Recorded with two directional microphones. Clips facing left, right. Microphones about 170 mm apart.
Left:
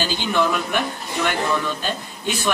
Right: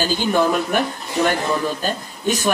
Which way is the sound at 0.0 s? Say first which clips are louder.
Right 3 dB; 45° right (ahead or behind).